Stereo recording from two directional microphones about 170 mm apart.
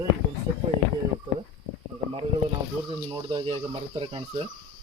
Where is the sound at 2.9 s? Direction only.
30° right (ahead or behind).